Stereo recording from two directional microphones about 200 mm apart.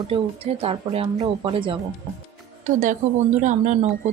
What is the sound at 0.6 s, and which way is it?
Speech, 30° right (ahead or behind).